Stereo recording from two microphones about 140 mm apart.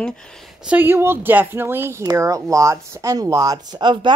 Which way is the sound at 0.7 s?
15° right (ahead or behind).